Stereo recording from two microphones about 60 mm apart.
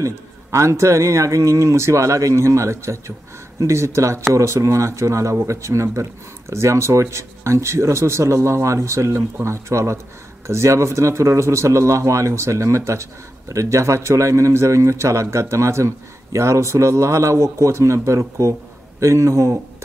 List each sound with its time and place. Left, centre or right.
0.0 s speech: right